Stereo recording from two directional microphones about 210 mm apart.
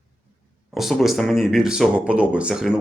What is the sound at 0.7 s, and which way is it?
Speech, centre (ahead or behind).